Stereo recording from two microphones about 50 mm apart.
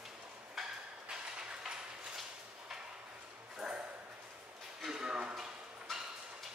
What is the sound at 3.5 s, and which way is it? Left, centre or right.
Dog, right.